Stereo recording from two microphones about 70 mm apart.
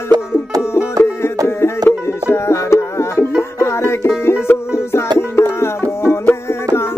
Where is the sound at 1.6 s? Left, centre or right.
Left.